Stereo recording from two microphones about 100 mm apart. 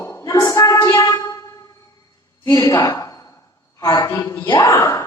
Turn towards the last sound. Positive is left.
turn(degrees=30)  # may be behind; listen again after turning